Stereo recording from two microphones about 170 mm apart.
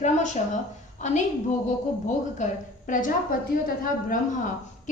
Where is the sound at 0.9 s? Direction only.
45° left (ahead or behind).